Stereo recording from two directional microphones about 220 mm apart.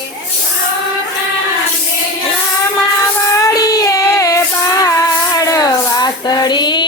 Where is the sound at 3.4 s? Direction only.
15° left (ahead or behind).